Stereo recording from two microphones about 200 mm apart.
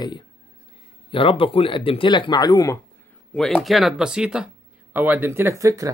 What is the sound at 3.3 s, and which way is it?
Speech, centre (ahead or behind).